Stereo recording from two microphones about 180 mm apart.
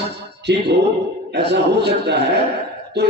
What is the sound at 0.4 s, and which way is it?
A man's voice, 65° right (ahead or behind).